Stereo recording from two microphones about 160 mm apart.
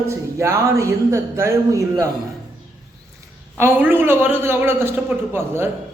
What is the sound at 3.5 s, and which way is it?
Speech, 15° right (ahead or behind).